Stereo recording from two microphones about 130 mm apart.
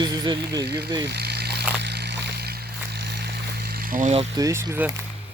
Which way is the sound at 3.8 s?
85° right.